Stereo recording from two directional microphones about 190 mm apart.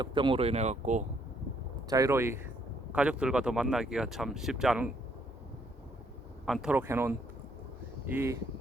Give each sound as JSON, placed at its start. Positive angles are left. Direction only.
{"t": 0.0, "sound": "speech", "side_deg": -25}
{"t": 1.9, "sound": "speech", "side_deg": -15}
{"t": 6.4, "sound": "speech", "side_deg": 0}